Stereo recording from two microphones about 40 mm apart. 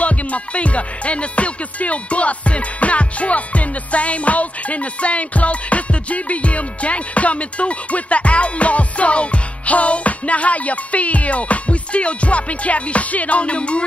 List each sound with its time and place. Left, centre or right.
0.0 s music: left